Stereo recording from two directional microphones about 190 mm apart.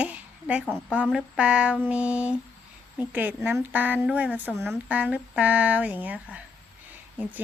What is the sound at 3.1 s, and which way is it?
Speech, 10° right (ahead or behind).